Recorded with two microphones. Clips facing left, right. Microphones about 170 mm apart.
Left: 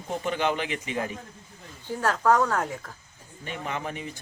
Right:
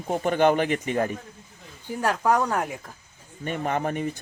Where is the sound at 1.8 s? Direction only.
15° right (ahead or behind).